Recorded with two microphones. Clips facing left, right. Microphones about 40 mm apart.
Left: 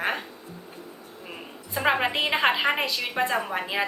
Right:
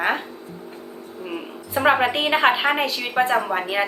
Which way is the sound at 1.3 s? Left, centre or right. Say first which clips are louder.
Right 7 dB; centre.